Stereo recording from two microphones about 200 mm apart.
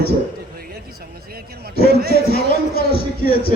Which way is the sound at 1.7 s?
50° left (ahead or behind).